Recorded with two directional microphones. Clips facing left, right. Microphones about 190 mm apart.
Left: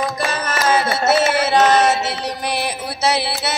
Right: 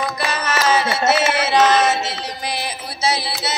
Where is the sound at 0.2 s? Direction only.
50° left (ahead or behind).